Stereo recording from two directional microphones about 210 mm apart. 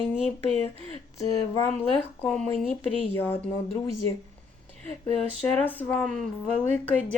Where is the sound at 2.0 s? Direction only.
5° left (ahead or behind).